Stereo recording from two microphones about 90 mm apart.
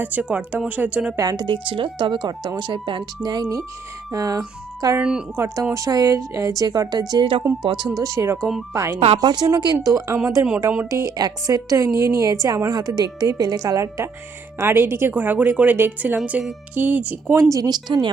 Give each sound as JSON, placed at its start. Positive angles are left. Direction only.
{"t": 0.0, "sound": "speech", "side_deg": -15}
{"t": 1.1, "sound": "a woman's voice", "side_deg": -40}
{"t": 1.6, "sound": "speech", "side_deg": -70}
{"t": 4.9, "sound": "speech", "side_deg": -10}
{"t": 5.7, "sound": "a woman's voice", "side_deg": -40}
{"t": 7.1, "sound": "speech", "side_deg": -65}
{"t": 7.9, "sound": "a woman's voice", "side_deg": -40}
{"t": 9.1, "sound": "a woman's voice", "side_deg": -50}
{"t": 10.6, "sound": "a woman's voice", "side_deg": -25}
{"t": 11.0, "sound": "a woman's voice", "side_deg": -45}
{"t": 17.5, "sound": "speech", "side_deg": -45}